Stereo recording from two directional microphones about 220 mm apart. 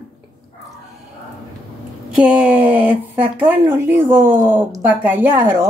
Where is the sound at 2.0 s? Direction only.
5° right (ahead or behind).